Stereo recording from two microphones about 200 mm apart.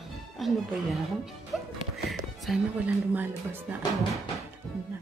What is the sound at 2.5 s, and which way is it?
A woman's voice, 10° right (ahead or behind).